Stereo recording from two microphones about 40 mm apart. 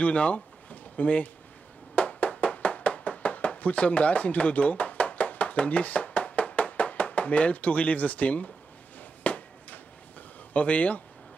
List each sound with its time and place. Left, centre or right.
0.0 s speech: left
2.0 s a sound: left
10.5 s speech: left